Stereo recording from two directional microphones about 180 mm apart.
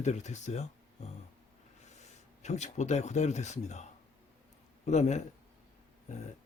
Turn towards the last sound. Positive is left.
turn(degrees=40)  # may be behind; listen again after turning